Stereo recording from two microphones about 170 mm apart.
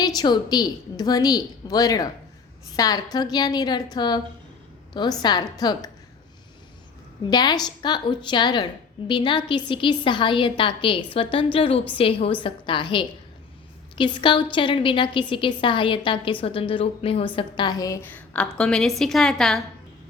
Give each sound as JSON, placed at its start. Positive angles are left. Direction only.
{"t": 0.2, "sound": "a woman's voice", "side_deg": 25}
{"t": 5.2, "sound": "a woman's voice", "side_deg": 25}
{"t": 7.3, "sound": "a woman's voice", "side_deg": 25}